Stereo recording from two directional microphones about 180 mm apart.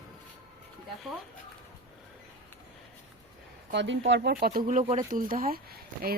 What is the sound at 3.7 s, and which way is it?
Speech, 80° right.